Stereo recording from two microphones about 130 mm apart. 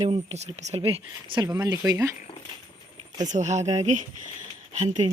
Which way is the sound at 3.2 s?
65° right (ahead or behind).